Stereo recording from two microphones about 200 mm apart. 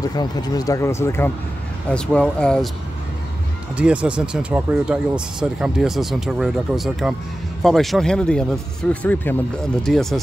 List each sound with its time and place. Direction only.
0.0 s speech: 20° left (ahead or behind); by 2.7 s 5° left (ahead or behind)
3.7 s speech: 5° right (ahead or behind)